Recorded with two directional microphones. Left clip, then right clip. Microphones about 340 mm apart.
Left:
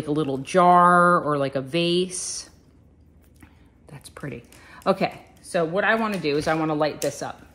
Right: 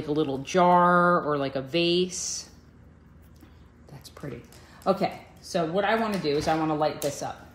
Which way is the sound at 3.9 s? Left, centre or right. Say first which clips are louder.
Left 4 dB; left.